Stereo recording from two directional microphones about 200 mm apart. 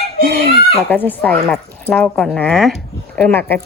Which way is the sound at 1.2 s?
5° left (ahead or behind).